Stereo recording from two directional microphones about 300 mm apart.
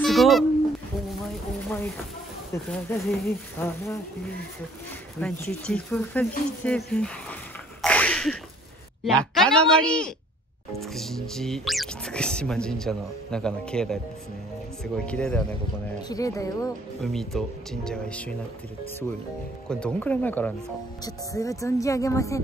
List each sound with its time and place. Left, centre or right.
0.0 s a sound: centre
2.5 s speech: centre
5.2 s speech: centre
7.8 s sneeze: centre
9.0 s speech: centre
17.0 s speech: centre
19.7 s speech: centre